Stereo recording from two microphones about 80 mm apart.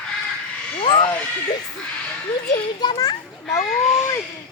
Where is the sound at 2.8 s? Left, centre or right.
Left.